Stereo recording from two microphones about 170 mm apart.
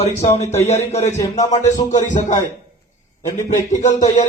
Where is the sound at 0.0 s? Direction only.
40° left (ahead or behind).